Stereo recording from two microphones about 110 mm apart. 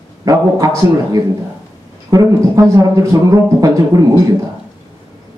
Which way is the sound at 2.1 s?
30° right (ahead or behind).